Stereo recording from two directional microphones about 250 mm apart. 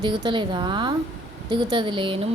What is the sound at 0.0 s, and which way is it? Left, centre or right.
A woman's voice, centre.